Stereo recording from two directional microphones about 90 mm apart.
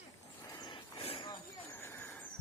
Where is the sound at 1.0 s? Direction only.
90° left.